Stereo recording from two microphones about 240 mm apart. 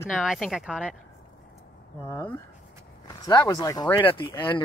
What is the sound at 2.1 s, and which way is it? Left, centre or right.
Speech, centre.